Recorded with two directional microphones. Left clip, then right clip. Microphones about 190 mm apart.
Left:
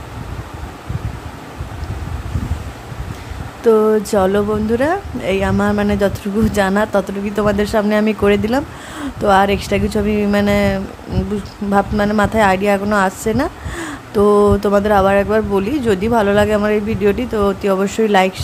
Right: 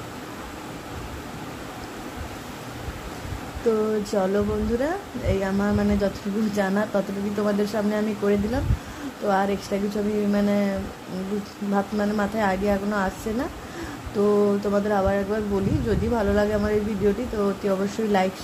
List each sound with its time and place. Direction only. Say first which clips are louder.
3.6 s speech: left 11 dB; 35° left (ahead or behind)